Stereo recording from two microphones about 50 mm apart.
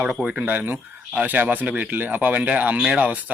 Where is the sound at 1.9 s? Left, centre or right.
Right.